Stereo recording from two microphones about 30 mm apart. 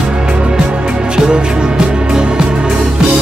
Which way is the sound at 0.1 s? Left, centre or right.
Right.